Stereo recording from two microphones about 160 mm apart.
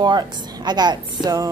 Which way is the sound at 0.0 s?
25° right (ahead or behind).